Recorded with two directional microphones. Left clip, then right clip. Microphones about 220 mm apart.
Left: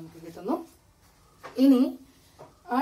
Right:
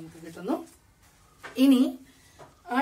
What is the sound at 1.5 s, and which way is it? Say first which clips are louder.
Speech: even; 50° right (ahead or behind).